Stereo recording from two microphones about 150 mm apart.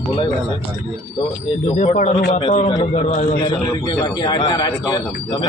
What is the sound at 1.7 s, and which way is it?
Speech, 50° left (ahead or behind).